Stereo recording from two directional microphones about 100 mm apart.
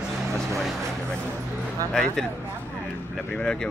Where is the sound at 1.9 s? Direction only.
5° left (ahead or behind).